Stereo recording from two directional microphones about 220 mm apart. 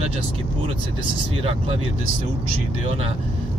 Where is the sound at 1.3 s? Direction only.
25° right (ahead or behind).